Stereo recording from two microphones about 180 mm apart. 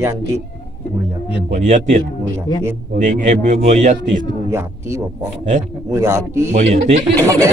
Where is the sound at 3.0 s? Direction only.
45° right (ahead or behind).